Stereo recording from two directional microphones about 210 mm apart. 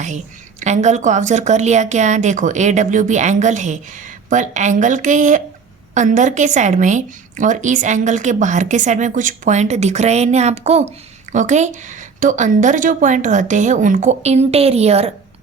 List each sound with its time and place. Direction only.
0.6 s a woman's voice: 35° right (ahead or behind)